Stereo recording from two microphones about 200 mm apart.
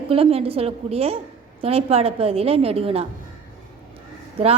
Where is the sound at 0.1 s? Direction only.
30° right (ahead or behind).